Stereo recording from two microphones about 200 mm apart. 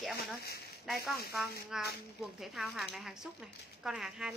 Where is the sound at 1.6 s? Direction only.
Centre (ahead or behind).